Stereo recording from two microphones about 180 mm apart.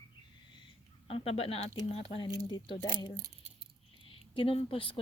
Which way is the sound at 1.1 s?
30° left (ahead or behind).